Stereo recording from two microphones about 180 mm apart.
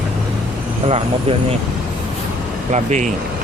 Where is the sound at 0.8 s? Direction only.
35° right (ahead or behind).